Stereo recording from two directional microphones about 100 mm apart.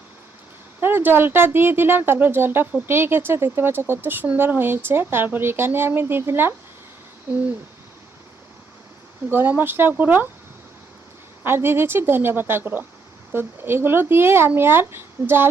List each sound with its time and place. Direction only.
0.8 s speech: 20° right (ahead or behind)
9.3 s speech: 20° right (ahead or behind)
11.4 s speech: 25° right (ahead or behind)